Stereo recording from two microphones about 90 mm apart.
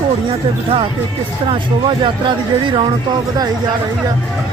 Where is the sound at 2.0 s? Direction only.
65° right (ahead or behind).